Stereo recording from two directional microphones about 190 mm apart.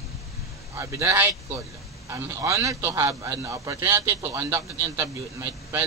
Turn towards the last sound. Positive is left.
turn(degrees=-15)  # may be behind; listen again after turning